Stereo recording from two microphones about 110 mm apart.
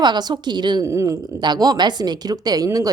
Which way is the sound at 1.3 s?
40° right (ahead or behind).